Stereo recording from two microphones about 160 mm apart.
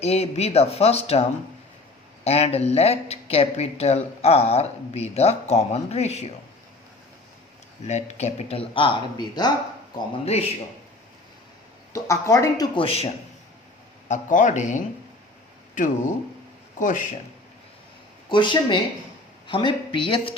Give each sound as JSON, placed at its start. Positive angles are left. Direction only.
{"t": 0.0, "sound": "speech", "side_deg": 40}
{"t": 2.2, "sound": "speech", "side_deg": 40}
{"t": 7.9, "sound": "speech", "side_deg": 45}
{"t": 11.9, "sound": "speech", "side_deg": 20}
{"t": 12.7, "sound": "speech", "side_deg": 35}
{"t": 14.1, "sound": "speech", "side_deg": 50}
{"t": 18.3, "sound": "speech", "side_deg": 30}